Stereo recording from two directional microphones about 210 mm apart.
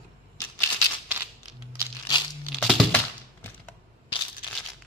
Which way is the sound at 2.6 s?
Centre (ahead or behind).